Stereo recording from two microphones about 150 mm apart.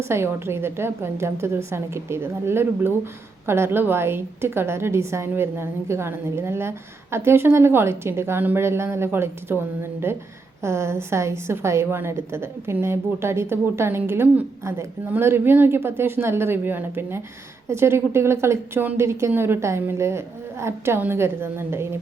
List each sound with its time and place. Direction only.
0.0 s a woman's voice: 15° right (ahead or behind)